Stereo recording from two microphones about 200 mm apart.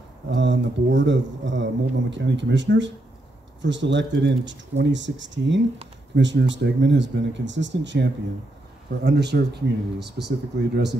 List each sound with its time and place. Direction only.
0.3 s speech: 65° right (ahead or behind)